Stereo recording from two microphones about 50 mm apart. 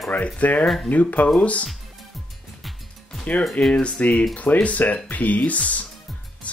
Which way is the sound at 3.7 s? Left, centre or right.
Left.